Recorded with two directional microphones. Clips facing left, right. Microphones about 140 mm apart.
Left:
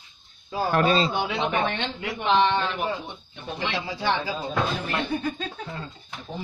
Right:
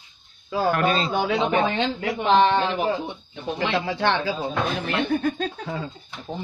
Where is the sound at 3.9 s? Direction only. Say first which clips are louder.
Right 4 dB; 75° right (ahead or behind).